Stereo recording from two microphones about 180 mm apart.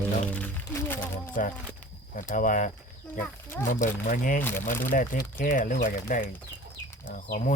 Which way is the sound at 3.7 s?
50° left (ahead or behind).